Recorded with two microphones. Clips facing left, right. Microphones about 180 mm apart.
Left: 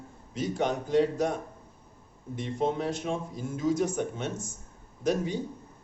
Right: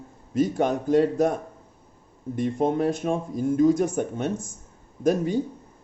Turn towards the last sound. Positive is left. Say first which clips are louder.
# right 6 dB
turn(degrees=-55)  # may be behind; listen again after turning